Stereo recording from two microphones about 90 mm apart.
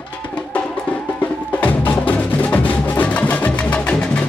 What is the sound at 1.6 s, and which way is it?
Music, 15° left (ahead or behind).